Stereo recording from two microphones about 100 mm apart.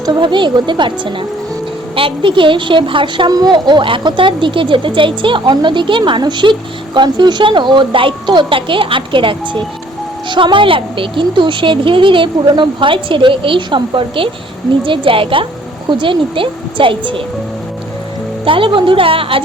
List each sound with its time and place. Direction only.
0.0 s speech: 50° right (ahead or behind)
3.3 s speech: 45° right (ahead or behind)
18.4 s speech: 60° right (ahead or behind)